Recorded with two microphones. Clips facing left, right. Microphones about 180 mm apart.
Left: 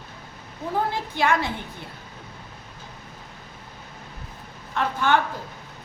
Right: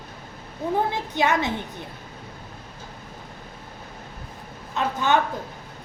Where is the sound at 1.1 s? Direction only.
20° right (ahead or behind).